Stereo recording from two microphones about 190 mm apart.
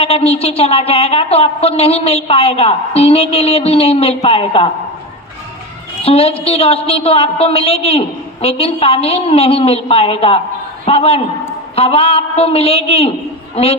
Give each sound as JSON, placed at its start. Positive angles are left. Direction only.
{"t": 0.0, "sound": "a woman's voice", "side_deg": 35}
{"t": 6.0, "sound": "a woman's voice", "side_deg": 30}